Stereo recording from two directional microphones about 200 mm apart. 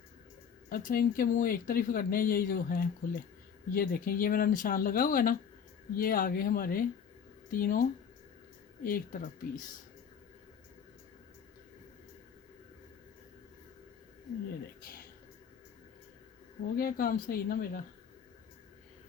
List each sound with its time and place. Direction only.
0.7 s speech: 45° left (ahead or behind)
14.8 s a sound: 45° left (ahead or behind)
16.7 s speech: 45° left (ahead or behind)